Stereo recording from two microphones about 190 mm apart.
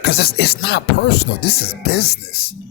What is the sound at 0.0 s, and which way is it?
Speech, 55° left (ahead or behind).